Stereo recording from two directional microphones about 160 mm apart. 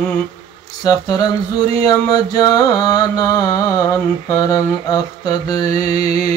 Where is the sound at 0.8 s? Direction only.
25° left (ahead or behind).